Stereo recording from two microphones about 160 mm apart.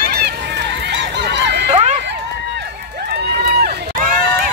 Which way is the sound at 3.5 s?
70° right (ahead or behind).